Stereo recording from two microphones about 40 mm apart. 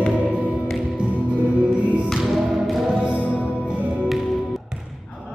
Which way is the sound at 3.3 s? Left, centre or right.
Left.